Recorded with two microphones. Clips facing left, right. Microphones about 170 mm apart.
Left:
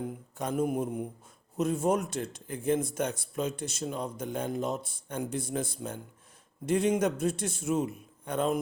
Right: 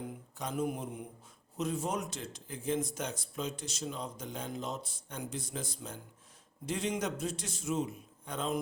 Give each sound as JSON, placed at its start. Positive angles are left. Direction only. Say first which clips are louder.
{"t": 0.3, "sound": "mantra", "louder": "left 6 dB", "side_deg": 50}
{"t": 1.5, "sound": "speech", "louder": "left 7 dB", "side_deg": 50}